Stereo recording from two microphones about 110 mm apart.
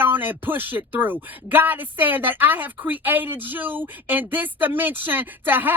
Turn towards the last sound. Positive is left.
turn(degrees=-15)  # may be behind; listen again after turning